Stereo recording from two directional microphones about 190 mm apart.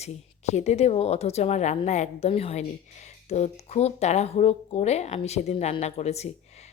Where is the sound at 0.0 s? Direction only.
35° left (ahead or behind).